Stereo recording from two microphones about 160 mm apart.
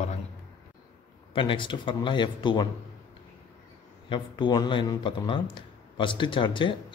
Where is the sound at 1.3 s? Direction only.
30° left (ahead or behind).